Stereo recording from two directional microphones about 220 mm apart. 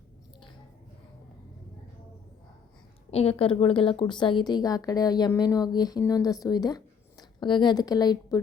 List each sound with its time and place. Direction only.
3.1 s a woman's voice: 25° left (ahead or behind)